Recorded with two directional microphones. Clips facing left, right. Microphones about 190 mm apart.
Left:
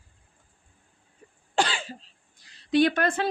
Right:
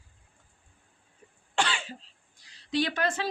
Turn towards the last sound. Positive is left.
turn(degrees=55)  # may be behind; listen again after turning